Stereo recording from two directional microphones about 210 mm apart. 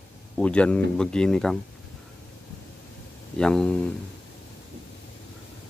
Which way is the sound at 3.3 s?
5° left (ahead or behind).